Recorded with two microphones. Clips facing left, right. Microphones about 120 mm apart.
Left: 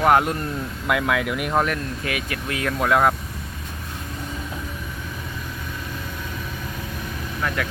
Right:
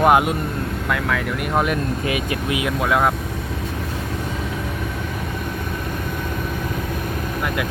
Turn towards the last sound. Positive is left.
turn(degrees=-15)  # may be behind; listen again after turning